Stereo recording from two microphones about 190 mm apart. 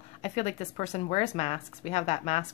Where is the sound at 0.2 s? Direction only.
35° left (ahead or behind).